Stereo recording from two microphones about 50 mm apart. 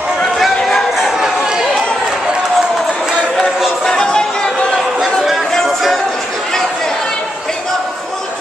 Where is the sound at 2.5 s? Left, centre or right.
Centre.